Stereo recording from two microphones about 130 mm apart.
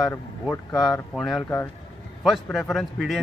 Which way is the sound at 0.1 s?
20° left (ahead or behind).